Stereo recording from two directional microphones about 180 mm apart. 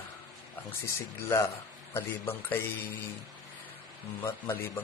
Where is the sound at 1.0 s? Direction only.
15° left (ahead or behind).